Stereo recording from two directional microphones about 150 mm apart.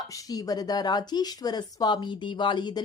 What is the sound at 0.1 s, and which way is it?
A woman's voice, 25° left (ahead or behind).